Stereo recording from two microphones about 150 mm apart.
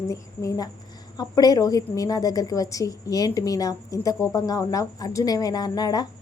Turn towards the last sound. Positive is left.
turn(degrees=25)  # may be behind; listen again after turning